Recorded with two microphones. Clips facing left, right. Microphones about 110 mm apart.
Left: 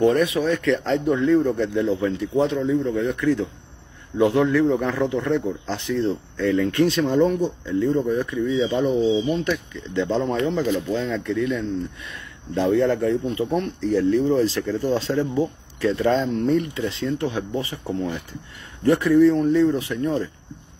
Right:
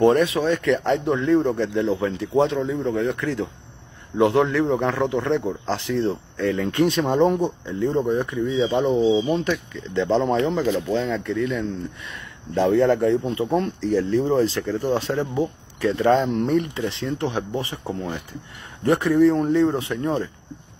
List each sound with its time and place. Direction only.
0.0 s speech: 30° right (ahead or behind)
10.4 s speech: 90° right
11.2 s speech: 30° right (ahead or behind)
18.9 s speech: 25° right (ahead or behind)